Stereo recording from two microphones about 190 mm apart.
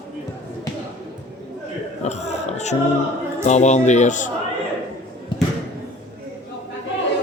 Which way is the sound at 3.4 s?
40° left (ahead or behind).